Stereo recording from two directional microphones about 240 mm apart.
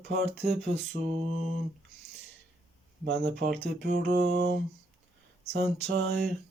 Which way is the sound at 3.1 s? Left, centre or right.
Right.